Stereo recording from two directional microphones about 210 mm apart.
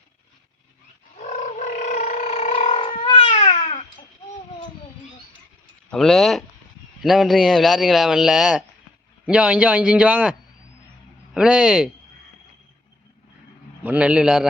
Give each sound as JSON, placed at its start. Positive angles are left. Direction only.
{"t": 1.2, "sound": "a sound", "side_deg": 35}
{"t": 2.8, "sound": "cat", "side_deg": 25}
{"t": 5.9, "sound": "a man's voice", "side_deg": 0}
{"t": 11.3, "sound": "a man's voice", "side_deg": -5}
{"t": 13.8, "sound": "a man's voice", "side_deg": -5}